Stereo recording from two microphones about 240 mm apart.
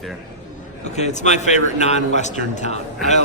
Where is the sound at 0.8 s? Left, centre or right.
Left.